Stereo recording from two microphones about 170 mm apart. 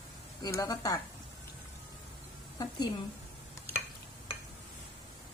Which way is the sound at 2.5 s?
25° left (ahead or behind).